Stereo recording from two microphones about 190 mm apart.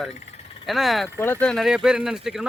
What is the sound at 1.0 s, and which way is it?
Speech, 10° left (ahead or behind).